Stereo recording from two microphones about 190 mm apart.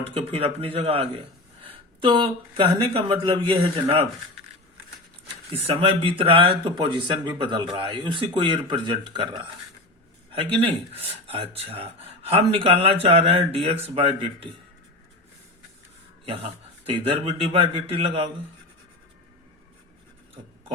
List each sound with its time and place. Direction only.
0.0 s speech: 30° right (ahead or behind)
5.5 s speech: 30° right (ahead or behind)
10.9 s speech: 30° right (ahead or behind)
16.8 s speech: 30° right (ahead or behind)